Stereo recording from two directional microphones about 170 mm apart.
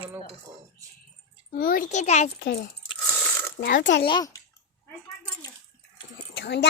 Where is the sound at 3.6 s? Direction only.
90° left.